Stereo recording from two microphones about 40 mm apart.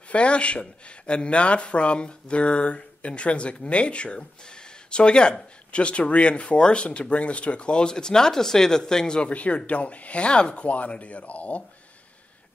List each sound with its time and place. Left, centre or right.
0.1 s speech: left
9.3 s speech: left